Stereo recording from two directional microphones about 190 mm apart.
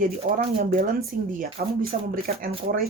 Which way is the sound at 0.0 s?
45° right (ahead or behind).